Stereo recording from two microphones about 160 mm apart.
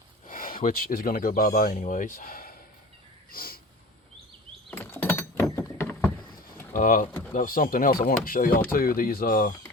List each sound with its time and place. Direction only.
0.3 s speech: 60° left (ahead or behind)
3.3 s sniff: 65° left (ahead or behind)
4.7 s a sound: 15° left (ahead or behind)
6.7 s speech: 55° left (ahead or behind)